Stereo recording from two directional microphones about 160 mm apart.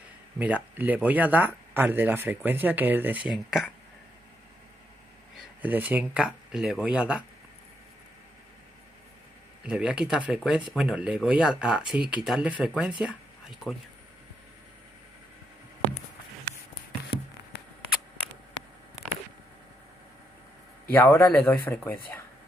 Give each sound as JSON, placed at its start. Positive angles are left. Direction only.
{"t": 0.4, "sound": "speech", "side_deg": -10}
{"t": 5.6, "sound": "speech", "side_deg": -10}
{"t": 9.6, "sound": "speech", "side_deg": -5}
{"t": 17.5, "sound": "a sound", "side_deg": 90}
{"t": 20.9, "sound": "speech", "side_deg": 10}